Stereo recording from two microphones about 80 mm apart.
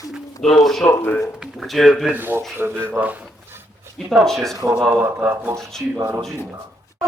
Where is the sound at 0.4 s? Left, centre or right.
Centre.